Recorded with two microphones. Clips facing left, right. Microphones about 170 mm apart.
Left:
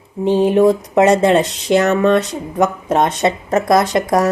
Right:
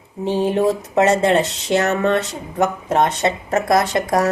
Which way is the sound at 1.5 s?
20° right (ahead or behind).